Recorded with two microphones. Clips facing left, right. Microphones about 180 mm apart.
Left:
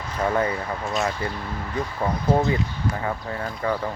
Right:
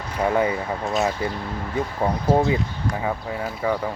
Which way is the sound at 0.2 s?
15° right (ahead or behind).